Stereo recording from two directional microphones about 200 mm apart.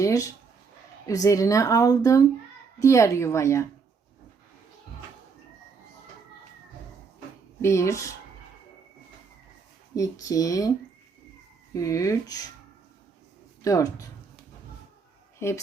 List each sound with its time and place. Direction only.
0.0 s a sound: 15° left (ahead or behind)
1.0 s speech: 15° left (ahead or behind)
7.6 s speech: 15° left (ahead or behind)
9.9 s speech: 15° left (ahead or behind)
11.7 s speech: 15° left (ahead or behind)
13.6 s speech: 15° left (ahead or behind)
15.4 s speech: 15° left (ahead or behind)